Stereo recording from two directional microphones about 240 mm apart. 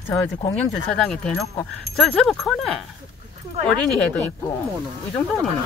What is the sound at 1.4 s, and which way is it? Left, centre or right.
Speech, centre.